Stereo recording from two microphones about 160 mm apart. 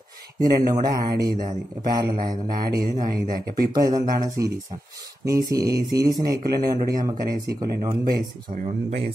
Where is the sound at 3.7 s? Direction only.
25° right (ahead or behind).